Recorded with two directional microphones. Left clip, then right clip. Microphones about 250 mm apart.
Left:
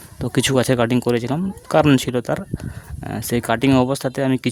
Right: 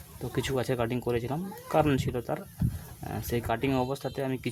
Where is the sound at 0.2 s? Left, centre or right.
Left.